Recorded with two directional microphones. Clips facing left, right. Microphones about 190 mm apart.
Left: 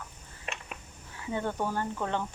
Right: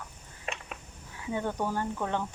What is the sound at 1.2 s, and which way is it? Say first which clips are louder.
A woman's voice: even; 10° right (ahead or behind).